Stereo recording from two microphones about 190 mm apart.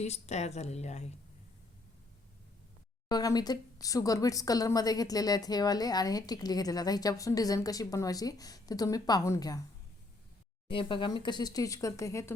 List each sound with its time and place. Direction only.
0.0 s speech: 35° left (ahead or behind)
3.1 s speech: 20° left (ahead or behind)
10.7 s speech: 25° left (ahead or behind)